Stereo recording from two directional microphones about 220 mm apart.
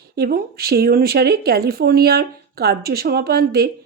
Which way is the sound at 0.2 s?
45° right (ahead or behind).